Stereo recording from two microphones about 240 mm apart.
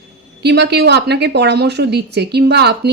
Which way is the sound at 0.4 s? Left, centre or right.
Right.